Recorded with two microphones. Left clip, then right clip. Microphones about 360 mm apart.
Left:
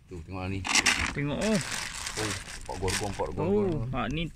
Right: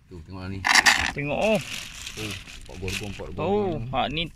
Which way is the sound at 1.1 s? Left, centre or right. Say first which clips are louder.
Right 6 dB; centre.